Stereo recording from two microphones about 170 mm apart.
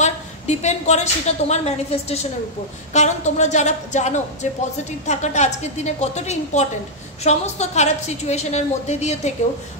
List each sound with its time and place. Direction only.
0.0 s a woman's voice: 45° left (ahead or behind)